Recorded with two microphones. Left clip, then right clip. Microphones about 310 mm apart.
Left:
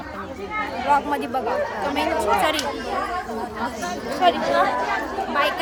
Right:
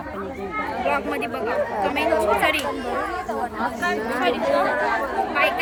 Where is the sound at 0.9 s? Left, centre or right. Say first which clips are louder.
Left 4 dB; centre.